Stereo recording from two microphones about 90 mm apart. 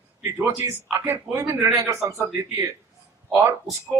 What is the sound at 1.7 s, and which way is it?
Speech, 40° right (ahead or behind).